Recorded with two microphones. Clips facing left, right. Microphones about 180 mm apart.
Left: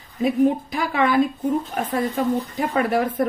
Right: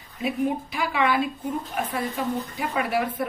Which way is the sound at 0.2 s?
45° left (ahead or behind).